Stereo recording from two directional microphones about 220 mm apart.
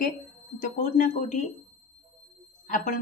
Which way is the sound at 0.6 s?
35° left (ahead or behind).